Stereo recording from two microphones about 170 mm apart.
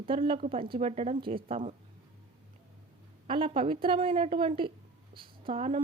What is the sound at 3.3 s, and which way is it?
Speech, 35° right (ahead or behind).